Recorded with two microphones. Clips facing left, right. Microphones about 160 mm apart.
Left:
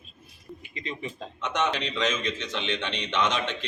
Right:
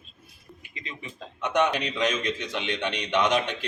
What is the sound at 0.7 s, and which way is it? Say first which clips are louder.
Speech: left 5 dB; 35° left (ahead or behind).